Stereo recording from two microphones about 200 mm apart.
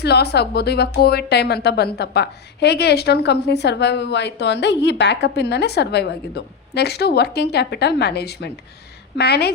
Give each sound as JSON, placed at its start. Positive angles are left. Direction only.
{"t": 0.0, "sound": "a woman's voice", "side_deg": 55}